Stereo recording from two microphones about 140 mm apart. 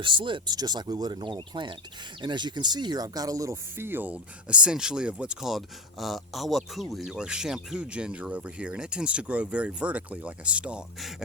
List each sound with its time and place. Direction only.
0.0 s speech: 35° right (ahead or behind); by 11.1 s 5° right (ahead or behind)